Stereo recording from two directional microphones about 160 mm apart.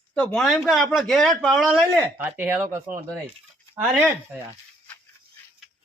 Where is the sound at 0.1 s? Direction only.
5° left (ahead or behind); by 2.6 s 10° right (ahead or behind).